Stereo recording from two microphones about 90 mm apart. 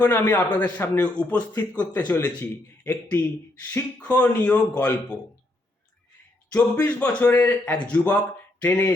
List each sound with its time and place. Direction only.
0.0 s a man's voice: 20° left (ahead or behind)
6.5 s a man's voice: 15° left (ahead or behind)